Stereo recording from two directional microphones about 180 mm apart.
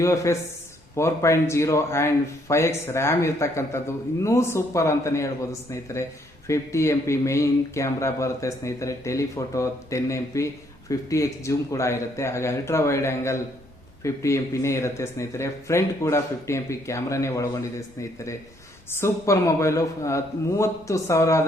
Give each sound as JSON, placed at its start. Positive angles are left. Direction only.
{"t": 0.0, "sound": "speech", "side_deg": 15}
{"t": 18.9, "sound": "speech", "side_deg": 15}